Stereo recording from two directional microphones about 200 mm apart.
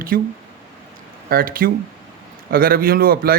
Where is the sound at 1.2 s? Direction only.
45° right (ahead or behind).